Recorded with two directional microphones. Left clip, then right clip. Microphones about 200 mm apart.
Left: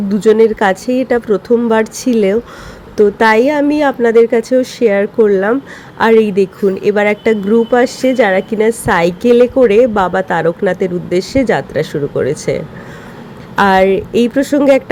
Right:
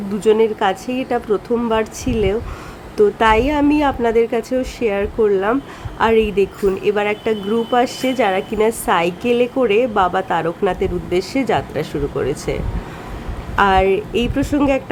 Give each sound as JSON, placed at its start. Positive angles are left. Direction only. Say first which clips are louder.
{"t": 0.1, "sound": "a woman's voice", "louder": "left 5 dB", "side_deg": 15}